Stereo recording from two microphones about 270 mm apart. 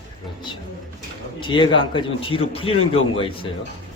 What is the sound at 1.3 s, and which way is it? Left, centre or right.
A man's voice, centre.